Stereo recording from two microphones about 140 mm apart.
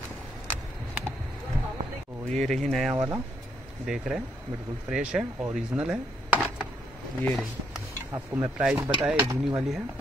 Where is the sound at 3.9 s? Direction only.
5° right (ahead or behind).